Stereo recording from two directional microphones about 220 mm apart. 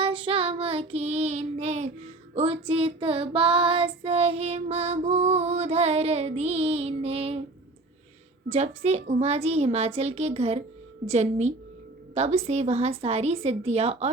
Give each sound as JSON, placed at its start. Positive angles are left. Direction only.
{"t": 0.0, "sound": "child singing", "side_deg": -25}
{"t": 8.4, "sound": "child singing", "side_deg": -30}
{"t": 11.1, "sound": "a woman's voice", "side_deg": -30}
{"t": 12.1, "sound": "child singing", "side_deg": -30}